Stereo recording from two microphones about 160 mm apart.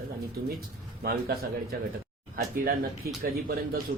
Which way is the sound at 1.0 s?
85° right.